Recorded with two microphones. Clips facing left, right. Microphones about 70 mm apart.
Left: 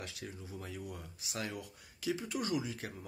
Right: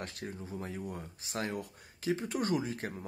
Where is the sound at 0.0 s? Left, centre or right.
Right.